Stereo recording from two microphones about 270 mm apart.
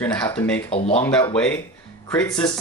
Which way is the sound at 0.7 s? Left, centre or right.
Left.